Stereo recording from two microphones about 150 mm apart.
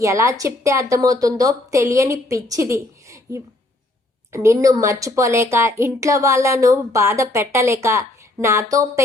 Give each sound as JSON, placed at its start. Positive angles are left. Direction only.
{"t": 0.0, "sound": "speech", "side_deg": -20}